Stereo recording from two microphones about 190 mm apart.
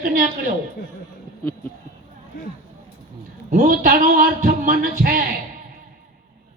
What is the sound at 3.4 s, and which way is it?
A woman's voice, 45° right (ahead or behind).